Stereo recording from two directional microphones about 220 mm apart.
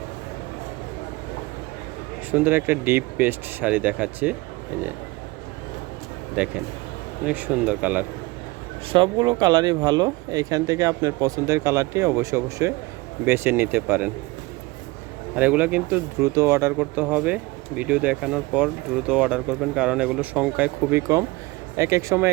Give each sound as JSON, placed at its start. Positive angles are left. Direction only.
{"t": 2.3, "sound": "speech", "side_deg": -10}
{"t": 6.4, "sound": "speech", "side_deg": -5}
{"t": 8.9, "sound": "speech", "side_deg": -20}
{"t": 15.4, "sound": "speech", "side_deg": -5}